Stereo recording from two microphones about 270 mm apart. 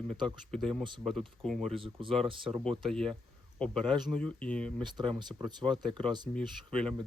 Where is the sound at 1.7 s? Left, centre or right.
Centre.